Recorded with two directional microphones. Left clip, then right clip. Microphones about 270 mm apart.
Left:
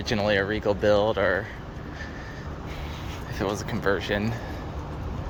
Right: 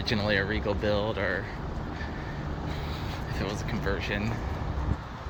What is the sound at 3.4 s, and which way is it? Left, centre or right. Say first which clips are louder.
Speech: left 7 dB; centre.